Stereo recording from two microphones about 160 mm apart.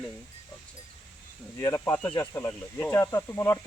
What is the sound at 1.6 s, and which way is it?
Speech, 15° left (ahead or behind).